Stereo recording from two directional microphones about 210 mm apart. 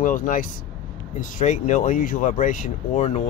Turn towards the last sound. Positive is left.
turn(degrees=35)  # may be behind; listen again after turning